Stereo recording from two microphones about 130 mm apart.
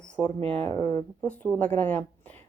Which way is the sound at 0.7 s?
25° left (ahead or behind).